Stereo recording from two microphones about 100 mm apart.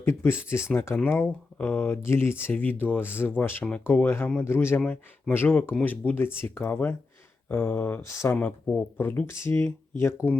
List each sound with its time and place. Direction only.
0.0 s speech: 20° left (ahead or behind)
8.4 s speech: 15° left (ahead or behind)